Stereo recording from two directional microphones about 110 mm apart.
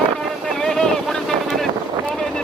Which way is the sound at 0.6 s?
5° left (ahead or behind).